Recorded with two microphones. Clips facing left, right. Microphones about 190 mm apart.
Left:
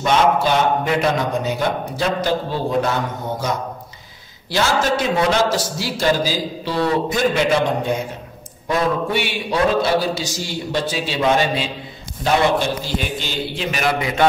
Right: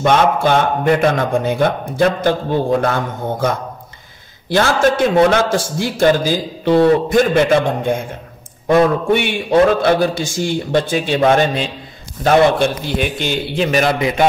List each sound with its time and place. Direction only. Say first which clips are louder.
0.0 s a man's voice: right 3 dB; 55° right (ahead or behind)